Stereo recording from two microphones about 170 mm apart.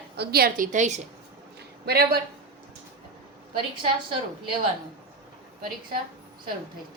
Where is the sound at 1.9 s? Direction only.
65° right (ahead or behind).